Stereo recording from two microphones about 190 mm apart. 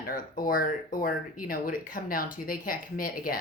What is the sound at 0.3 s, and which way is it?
Speech, 45° left (ahead or behind).